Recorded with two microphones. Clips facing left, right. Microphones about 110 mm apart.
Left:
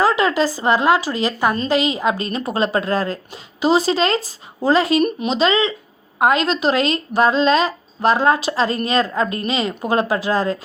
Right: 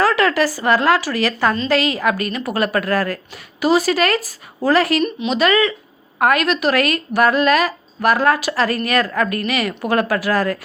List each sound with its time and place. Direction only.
0.0 s a woman's voice: 20° left (ahead or behind)